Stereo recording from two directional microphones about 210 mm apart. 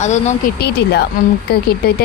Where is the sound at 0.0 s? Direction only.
35° left (ahead or behind).